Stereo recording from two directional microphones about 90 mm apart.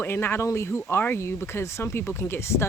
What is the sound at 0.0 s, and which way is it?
Speech, 25° left (ahead or behind).